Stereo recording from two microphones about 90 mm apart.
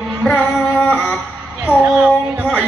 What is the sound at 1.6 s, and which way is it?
Music, 15° right (ahead or behind).